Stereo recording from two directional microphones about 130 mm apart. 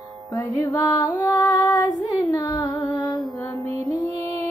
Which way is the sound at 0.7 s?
30° left (ahead or behind).